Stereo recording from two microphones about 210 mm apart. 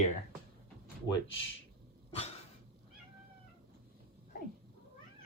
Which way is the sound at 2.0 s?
30° left (ahead or behind).